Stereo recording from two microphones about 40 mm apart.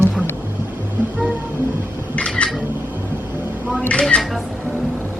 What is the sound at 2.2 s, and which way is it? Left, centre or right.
Cat, left.